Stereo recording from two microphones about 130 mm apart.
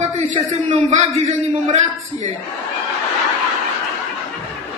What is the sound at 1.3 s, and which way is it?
A man's voice, 70° right (ahead or behind).